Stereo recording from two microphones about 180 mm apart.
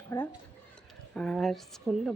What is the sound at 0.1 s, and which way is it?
Speech, 15° left (ahead or behind).